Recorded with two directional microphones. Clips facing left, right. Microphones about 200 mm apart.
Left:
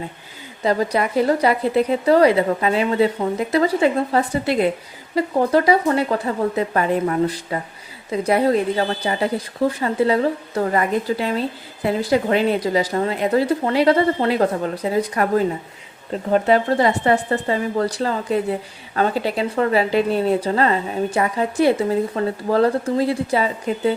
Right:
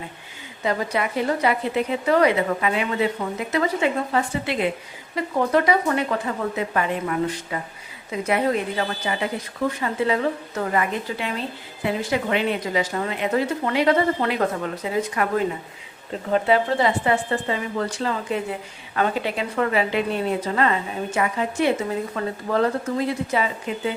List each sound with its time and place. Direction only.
0.6 s a woman's voice: 35° left (ahead or behind)